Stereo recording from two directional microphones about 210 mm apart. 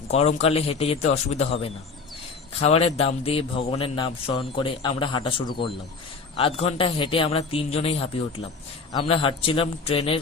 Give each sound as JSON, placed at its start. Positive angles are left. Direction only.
{"t": 0.1, "sound": "a man's voice", "side_deg": 30}